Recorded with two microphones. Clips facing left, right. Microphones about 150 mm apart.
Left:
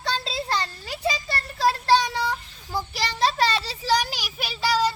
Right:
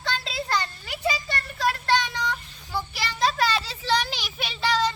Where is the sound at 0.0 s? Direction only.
35° left (ahead or behind).